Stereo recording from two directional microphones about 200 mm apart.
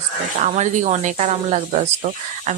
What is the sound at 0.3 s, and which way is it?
A woman's voice, 35° right (ahead or behind).